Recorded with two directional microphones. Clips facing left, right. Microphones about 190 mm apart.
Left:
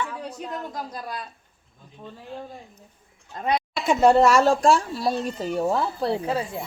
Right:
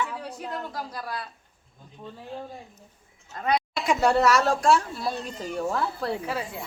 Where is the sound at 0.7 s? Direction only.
20° left (ahead or behind).